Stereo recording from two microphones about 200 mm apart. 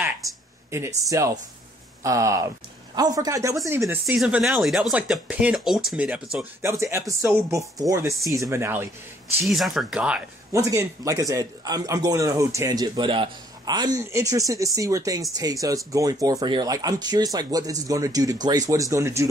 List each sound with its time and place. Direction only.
0.7 s speech: 15° right (ahead or behind)
9.5 s speech: centre (ahead or behind)